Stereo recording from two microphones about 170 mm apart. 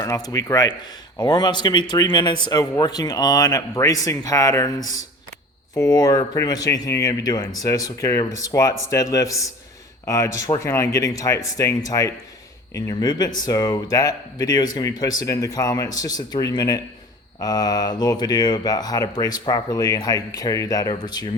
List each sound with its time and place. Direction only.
0.0 s speech: 20° left (ahead or behind)